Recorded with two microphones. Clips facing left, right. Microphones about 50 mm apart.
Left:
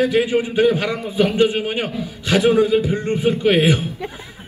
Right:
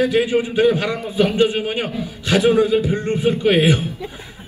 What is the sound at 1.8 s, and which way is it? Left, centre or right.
Speech, right.